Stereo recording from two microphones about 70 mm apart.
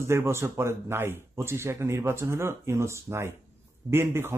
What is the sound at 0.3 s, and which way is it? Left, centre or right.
Speech, right.